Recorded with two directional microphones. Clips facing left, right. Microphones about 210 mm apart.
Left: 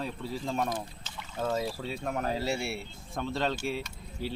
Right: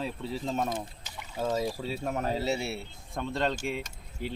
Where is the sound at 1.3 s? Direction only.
10° right (ahead or behind).